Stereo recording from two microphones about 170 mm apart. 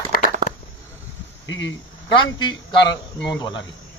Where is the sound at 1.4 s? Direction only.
90° left.